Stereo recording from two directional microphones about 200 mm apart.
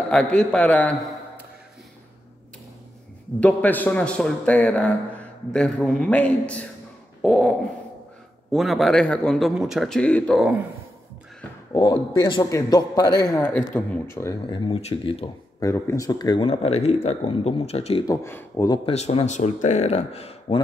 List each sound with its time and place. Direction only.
0.1 s a man's voice: 5° left (ahead or behind)
3.3 s speech: 5° left (ahead or behind)
7.2 s dog: centre (ahead or behind)
8.5 s speech: centre (ahead or behind)
11.7 s speech: 20° left (ahead or behind)
13.3 s a man's voice: 5° left (ahead or behind)
14.5 s speech: 25° left (ahead or behind)
15.6 s speech: 15° left (ahead or behind); by 18.0 s 30° left (ahead or behind)
18.0 s a man's voice: 15° left (ahead or behind)
18.9 s speech: 30° left (ahead or behind)